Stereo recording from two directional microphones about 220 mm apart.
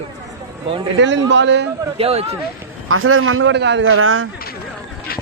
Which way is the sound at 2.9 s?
70° right (ahead or behind).